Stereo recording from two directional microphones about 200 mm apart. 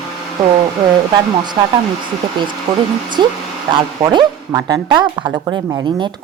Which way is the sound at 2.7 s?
20° right (ahead or behind).